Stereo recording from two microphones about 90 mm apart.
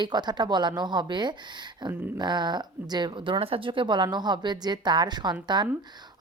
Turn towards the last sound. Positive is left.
turn(degrees=-55)  # may be behind; listen again after turning